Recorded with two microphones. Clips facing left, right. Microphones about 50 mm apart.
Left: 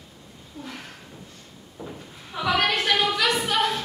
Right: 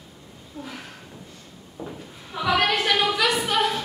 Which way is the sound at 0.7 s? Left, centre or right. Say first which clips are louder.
Left 1 dB; centre.